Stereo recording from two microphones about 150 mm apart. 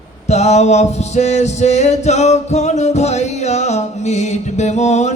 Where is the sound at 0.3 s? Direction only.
45° left (ahead or behind).